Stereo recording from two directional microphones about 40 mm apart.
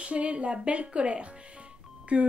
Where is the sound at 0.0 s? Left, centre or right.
Right.